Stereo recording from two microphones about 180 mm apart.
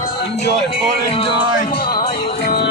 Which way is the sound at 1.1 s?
30° left (ahead or behind).